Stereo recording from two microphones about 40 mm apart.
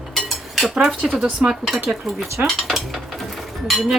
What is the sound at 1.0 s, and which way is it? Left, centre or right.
Speech, centre.